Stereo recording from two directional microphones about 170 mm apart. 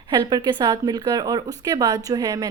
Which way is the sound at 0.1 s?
25° right (ahead or behind).